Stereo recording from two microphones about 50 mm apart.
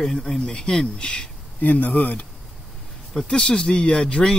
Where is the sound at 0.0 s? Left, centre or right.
Centre.